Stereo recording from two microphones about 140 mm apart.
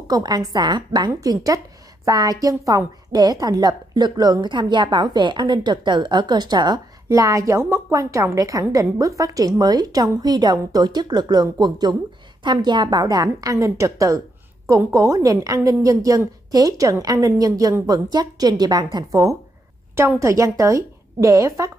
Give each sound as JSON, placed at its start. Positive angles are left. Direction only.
{"t": 0.1, "sound": "a woman's voice", "side_deg": -30}